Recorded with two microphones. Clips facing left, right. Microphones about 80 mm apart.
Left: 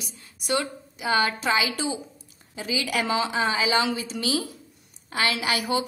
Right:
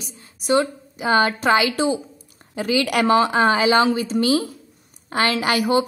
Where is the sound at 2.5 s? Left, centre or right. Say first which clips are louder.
Right 7 dB; right.